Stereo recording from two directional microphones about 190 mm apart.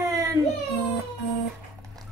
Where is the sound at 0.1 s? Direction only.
20° right (ahead or behind).